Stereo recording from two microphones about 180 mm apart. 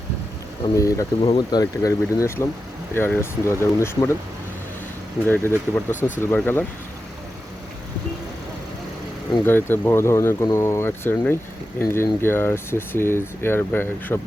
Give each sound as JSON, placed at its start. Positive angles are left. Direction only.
{"t": 0.8, "sound": "speech", "side_deg": 20}
{"t": 5.3, "sound": "speech", "side_deg": 10}
{"t": 5.9, "sound": "speech", "side_deg": 45}
{"t": 6.3, "sound": "speech", "side_deg": 10}
{"t": 9.5, "sound": "speech", "side_deg": 10}